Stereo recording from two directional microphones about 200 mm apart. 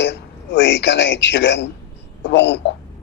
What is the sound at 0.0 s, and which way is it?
A man's voice, 60° left (ahead or behind).